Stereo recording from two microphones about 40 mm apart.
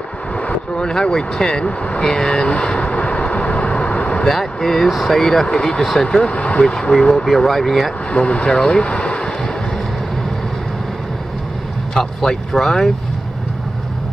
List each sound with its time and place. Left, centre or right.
0.5 s speech: left
2.4 s vehicle: left
4.3 s speech: centre
6.2 s speech: left
6.6 s speech: left
7.2 s speech: centre
8.1 s speech: left
8.8 s vehicle: left
11.9 s speech: centre